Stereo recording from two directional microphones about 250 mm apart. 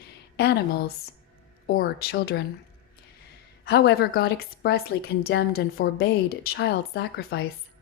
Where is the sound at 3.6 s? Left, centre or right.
Left.